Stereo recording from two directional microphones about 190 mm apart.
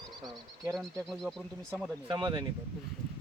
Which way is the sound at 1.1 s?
Centre (ahead or behind).